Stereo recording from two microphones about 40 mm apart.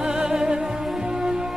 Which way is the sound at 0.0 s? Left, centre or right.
Centre.